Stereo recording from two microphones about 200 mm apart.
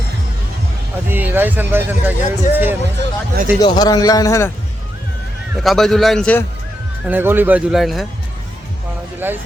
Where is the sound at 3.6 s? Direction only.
20° left (ahead or behind).